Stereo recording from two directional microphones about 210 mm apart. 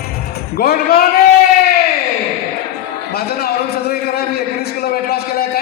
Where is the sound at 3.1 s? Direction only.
50° left (ahead or behind).